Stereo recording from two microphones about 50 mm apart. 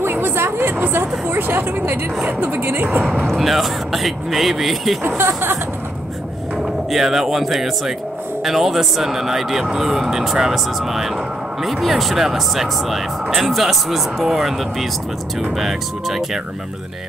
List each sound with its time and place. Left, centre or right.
0.0 s speech: right
3.3 s speech: centre
5.0 s speech: right
6.9 s speech: centre